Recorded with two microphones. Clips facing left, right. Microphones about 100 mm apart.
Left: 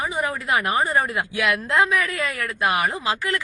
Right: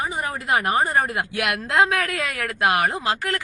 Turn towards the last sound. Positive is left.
turn(degrees=-50)  # may be behind; listen again after turning